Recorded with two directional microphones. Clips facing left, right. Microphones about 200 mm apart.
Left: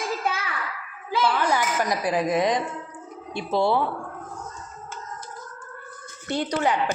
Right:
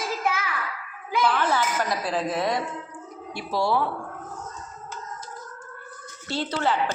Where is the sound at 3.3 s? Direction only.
20° left (ahead or behind).